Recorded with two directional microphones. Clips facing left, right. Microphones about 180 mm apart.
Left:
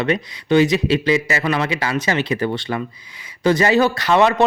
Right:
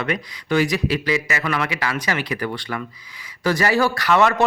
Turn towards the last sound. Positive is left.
turn(degrees=20)  # may be behind; listen again after turning